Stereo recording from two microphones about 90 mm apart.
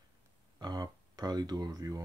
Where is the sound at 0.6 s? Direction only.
50° right (ahead or behind).